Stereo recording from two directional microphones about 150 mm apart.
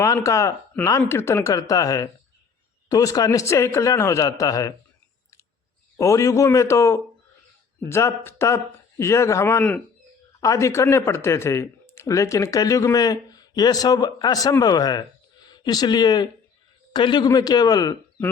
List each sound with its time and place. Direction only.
0.0 s speech: 20° left (ahead or behind)
6.0 s speech: 20° left (ahead or behind)